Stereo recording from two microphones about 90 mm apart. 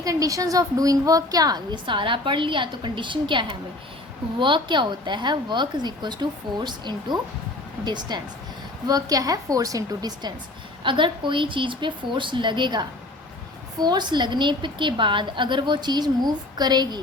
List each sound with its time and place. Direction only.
0.0 s a woman's voice: 40° right (ahead or behind)
10.8 s a woman's voice: 65° right (ahead or behind)
13.8 s a woman's voice: 55° right (ahead or behind)